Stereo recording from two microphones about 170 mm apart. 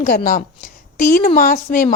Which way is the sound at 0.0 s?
50° left (ahead or behind).